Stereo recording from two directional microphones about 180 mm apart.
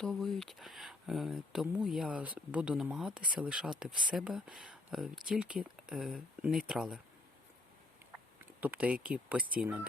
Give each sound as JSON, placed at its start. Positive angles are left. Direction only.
{"t": 0.0, "sound": "speech", "side_deg": 0}
{"t": 8.6, "sound": "speech", "side_deg": -10}